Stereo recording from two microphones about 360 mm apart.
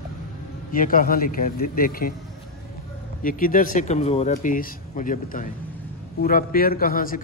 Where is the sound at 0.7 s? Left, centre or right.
Left.